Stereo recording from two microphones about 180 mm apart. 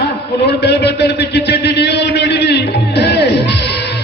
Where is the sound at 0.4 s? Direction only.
70° left (ahead or behind).